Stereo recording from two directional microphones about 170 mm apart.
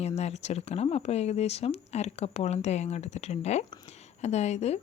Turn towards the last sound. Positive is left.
turn(degrees=40)  # may be behind; listen again after turning